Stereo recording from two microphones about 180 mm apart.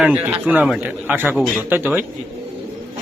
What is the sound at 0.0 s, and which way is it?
A man's voice, 10° right (ahead or behind).